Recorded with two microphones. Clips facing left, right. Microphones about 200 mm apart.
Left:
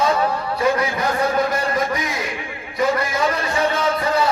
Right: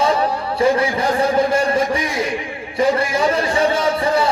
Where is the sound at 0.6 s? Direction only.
30° right (ahead or behind).